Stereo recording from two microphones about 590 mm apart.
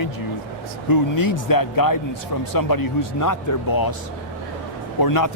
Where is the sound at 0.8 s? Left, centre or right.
Left.